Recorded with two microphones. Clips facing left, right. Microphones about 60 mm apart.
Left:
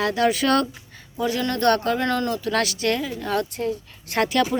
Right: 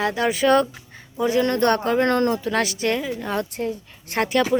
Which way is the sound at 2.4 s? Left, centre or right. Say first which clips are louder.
Right 1 dB; right.